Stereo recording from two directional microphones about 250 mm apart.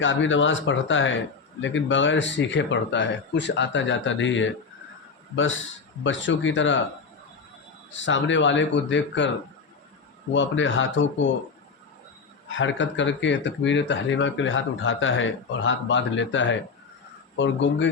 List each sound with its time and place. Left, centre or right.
0.0 s speech: left
6.0 s speech: left
7.9 s speech: left
10.3 s speech: left
12.5 s speech: left